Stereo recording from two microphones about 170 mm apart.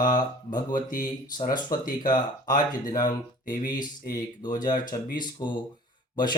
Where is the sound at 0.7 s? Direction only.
55° left (ahead or behind).